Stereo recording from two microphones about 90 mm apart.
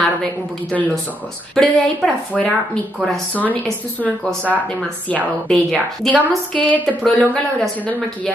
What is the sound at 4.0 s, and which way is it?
Speech, 10° left (ahead or behind).